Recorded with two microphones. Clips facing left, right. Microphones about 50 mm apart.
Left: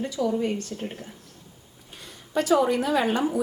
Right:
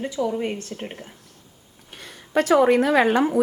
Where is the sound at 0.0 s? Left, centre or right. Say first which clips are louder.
Right 1 dB; right.